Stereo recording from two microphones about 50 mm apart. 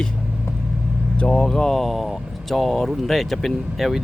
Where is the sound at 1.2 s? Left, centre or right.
Centre.